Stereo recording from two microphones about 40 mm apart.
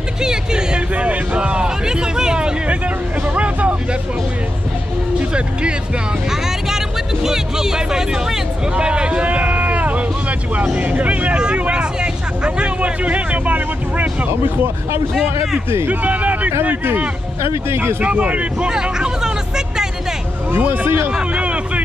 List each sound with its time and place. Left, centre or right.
0.2 s hubbub: centre
0.9 s a sound: right
3.3 s vehicle: right
5.3 s speech: right
7.2 s speech: centre
8.7 s a sound: right
10.8 s a man's voice: right
14.4 s speech: right
15.9 s a man's voice: right
17.6 s speech: right
18.0 s a man's voice: right
18.7 s hubbub: centre
20.5 s speech: right
21.1 s a sound: right